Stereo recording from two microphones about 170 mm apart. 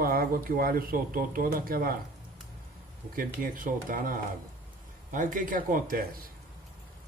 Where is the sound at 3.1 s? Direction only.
55° right (ahead or behind).